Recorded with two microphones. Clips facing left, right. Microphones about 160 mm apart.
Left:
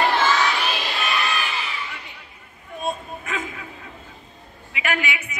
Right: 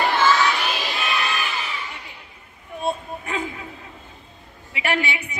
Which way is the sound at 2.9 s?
30° right (ahead or behind).